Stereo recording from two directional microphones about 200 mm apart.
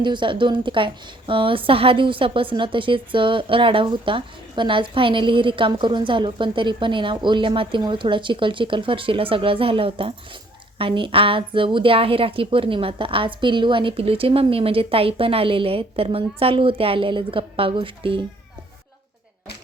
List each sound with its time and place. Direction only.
0.0 s a woman's voice: 25° right (ahead or behind)